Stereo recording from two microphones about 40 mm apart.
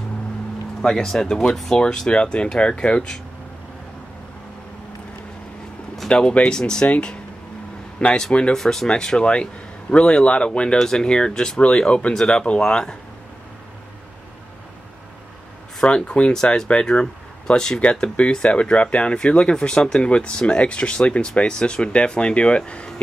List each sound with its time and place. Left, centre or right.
0.8 s speech: centre
6.0 s speech: left
8.3 s speech: left
8.5 s speech: centre
15.8 s speech: left
17.7 s speech: left